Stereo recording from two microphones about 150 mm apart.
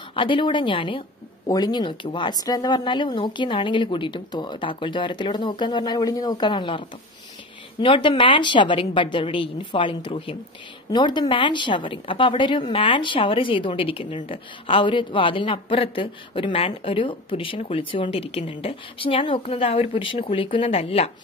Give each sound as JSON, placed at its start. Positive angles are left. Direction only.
{"t": 0.1, "sound": "a woman's voice", "side_deg": 35}
{"t": 7.8, "sound": "a woman's voice", "side_deg": 35}